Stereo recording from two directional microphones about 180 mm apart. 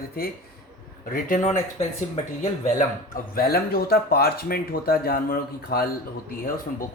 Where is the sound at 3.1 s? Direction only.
55° left (ahead or behind).